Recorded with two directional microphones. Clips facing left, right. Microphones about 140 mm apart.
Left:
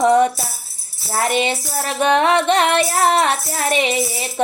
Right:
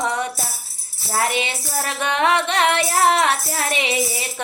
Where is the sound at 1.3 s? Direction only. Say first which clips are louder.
Left 6 dB; 45° left (ahead or behind).